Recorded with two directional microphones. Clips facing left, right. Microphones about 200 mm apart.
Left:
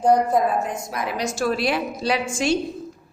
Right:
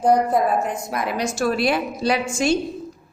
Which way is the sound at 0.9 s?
50° right (ahead or behind).